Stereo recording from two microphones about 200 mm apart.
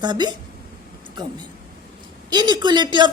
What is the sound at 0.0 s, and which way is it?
A woman's voice, 20° right (ahead or behind).